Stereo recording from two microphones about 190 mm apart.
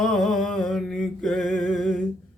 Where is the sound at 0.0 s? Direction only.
Centre (ahead or behind).